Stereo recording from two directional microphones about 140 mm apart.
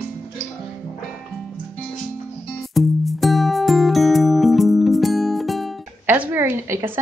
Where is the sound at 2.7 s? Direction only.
Centre (ahead or behind).